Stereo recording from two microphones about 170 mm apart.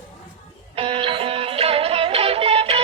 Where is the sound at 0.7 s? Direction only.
30° right (ahead or behind).